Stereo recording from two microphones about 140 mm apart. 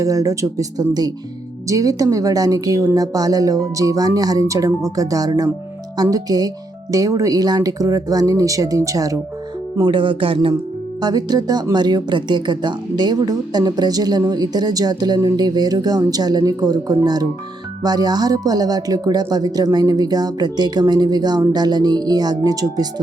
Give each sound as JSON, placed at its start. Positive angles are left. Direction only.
{"t": 0.0, "sound": "speech", "side_deg": -25}
{"t": 9.8, "sound": "speech", "side_deg": -35}
{"t": 11.0, "sound": "speech", "side_deg": -30}